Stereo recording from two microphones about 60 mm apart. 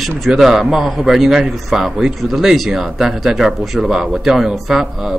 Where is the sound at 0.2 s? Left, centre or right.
Centre.